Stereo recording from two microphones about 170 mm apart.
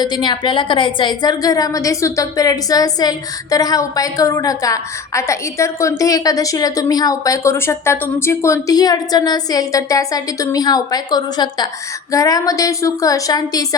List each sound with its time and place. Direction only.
0.0 s a woman's voice: 25° left (ahead or behind)